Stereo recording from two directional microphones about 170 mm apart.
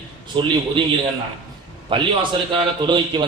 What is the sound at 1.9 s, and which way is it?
Speech, 30° right (ahead or behind).